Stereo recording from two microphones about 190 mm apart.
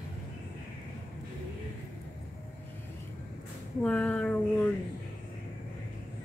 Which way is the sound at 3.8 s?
5° left (ahead or behind).